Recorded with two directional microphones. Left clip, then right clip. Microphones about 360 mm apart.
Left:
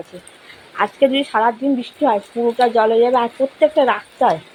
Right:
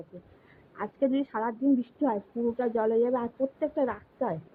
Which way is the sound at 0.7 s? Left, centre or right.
Centre.